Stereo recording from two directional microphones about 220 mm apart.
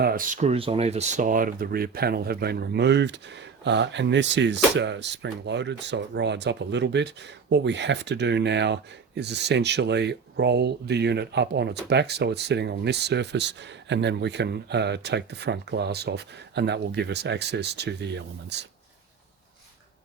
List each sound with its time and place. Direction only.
0.0 s speech: 40° right (ahead or behind)